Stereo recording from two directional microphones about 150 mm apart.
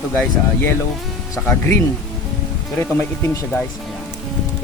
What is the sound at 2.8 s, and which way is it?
Speech, 15° left (ahead or behind).